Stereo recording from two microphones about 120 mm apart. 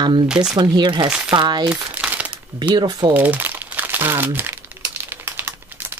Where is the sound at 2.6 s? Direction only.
35° right (ahead or behind).